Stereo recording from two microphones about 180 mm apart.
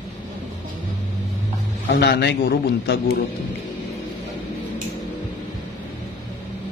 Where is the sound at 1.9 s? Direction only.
70° left (ahead or behind).